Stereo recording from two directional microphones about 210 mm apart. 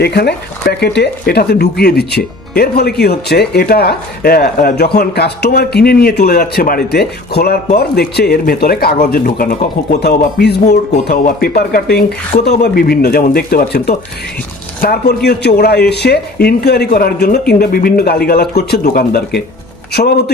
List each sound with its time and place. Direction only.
0.0 s speech: 50° left (ahead or behind)